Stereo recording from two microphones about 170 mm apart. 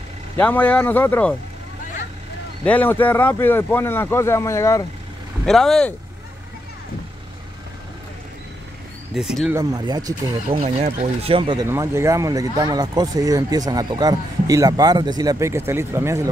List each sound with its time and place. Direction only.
0.4 s speech: 10° left (ahead or behind)
2.6 s speech: 10° left (ahead or behind)
5.4 s speech: centre (ahead or behind)
9.1 s speech: centre (ahead or behind)
9.5 s speech: 20° right (ahead or behind)
10.6 s speech: 40° right (ahead or behind)
11.7 s speech: 15° right (ahead or behind)